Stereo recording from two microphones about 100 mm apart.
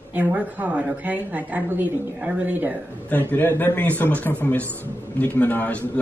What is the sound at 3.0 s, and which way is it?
A man's voice, 20° left (ahead or behind).